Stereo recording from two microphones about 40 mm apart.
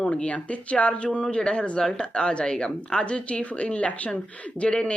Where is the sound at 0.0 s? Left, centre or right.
Left.